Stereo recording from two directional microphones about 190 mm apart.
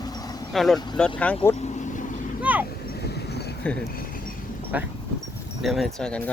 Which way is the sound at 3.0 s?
60° left (ahead or behind).